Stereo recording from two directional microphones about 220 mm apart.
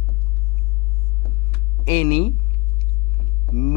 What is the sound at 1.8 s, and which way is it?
Speech, 10° left (ahead or behind).